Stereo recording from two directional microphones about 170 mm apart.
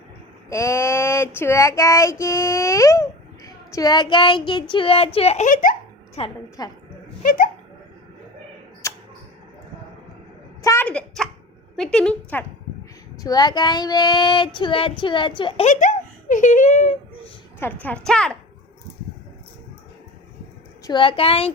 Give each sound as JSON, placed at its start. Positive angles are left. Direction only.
{"t": 0.5, "sound": "child singing", "side_deg": 15}
{"t": 4.7, "sound": "a child's voice", "side_deg": 30}
{"t": 6.1, "sound": "a child's voice", "side_deg": 30}
{"t": 7.2, "sound": "speech", "side_deg": 55}
{"t": 8.8, "sound": "a sound", "side_deg": 15}
{"t": 10.6, "sound": "a sound", "side_deg": 15}
{"t": 10.8, "sound": "a sound", "side_deg": 5}
{"t": 11.8, "sound": "speech", "side_deg": 5}
{"t": 13.2, "sound": "child singing", "side_deg": 25}
{"t": 15.6, "sound": "a child's voice", "side_deg": 45}
{"t": 17.6, "sound": "speech", "side_deg": 10}
{"t": 20.8, "sound": "a child's voice", "side_deg": 30}